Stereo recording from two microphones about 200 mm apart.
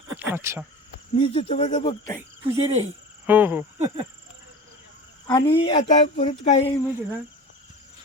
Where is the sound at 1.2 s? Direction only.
30° left (ahead or behind).